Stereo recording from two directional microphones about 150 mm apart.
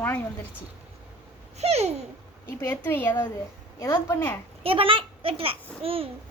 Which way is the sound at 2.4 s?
10° left (ahead or behind).